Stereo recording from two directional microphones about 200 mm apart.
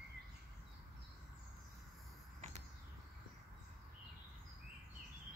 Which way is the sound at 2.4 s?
35° right (ahead or behind).